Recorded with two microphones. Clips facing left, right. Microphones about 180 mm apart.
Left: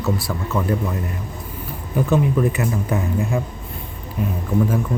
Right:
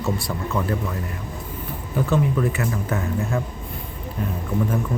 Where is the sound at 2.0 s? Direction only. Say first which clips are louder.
Left 3 dB; 15° left (ahead or behind).